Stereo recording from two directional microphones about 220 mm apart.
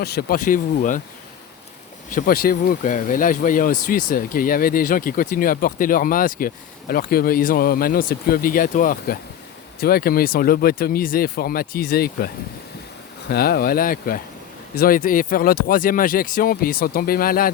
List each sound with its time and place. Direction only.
0.0 s speech: 45° left (ahead or behind)
2.0 s speech: 40° left (ahead or behind)
13.3 s speech: 45° left (ahead or behind)